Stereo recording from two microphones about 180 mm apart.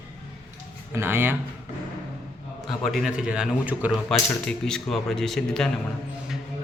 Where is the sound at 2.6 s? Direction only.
Centre (ahead or behind).